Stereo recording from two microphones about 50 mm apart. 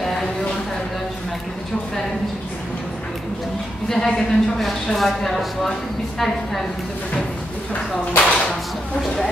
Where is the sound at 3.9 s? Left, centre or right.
Centre.